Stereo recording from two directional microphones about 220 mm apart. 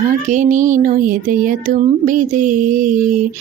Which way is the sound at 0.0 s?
35° right (ahead or behind).